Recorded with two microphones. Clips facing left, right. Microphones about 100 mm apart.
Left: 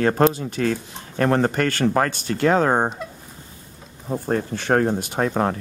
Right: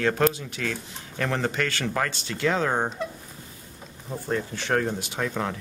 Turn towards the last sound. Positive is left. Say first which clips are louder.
# left 7 dB
turn(degrees=45)  # may be behind; listen again after turning